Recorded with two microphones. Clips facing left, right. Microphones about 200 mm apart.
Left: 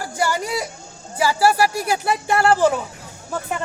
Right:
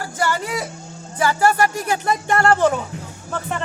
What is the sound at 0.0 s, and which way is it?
Speech, 10° left (ahead or behind).